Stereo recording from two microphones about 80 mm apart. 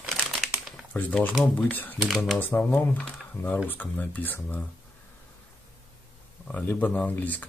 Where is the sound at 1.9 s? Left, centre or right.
Centre.